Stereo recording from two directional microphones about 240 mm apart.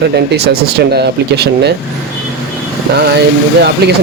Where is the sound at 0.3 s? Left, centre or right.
Right.